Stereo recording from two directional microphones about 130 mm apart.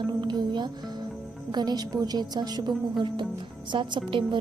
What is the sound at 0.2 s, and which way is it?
A woman's voice, 35° right (ahead or behind).